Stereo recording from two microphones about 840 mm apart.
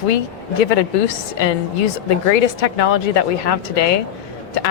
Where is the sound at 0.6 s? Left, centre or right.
Left.